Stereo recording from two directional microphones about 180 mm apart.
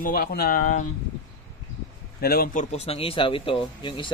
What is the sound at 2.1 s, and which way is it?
Speech, 55° left (ahead or behind).